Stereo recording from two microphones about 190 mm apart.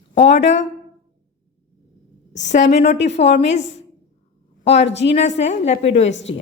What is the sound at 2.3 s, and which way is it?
A woman's voice, 40° left (ahead or behind).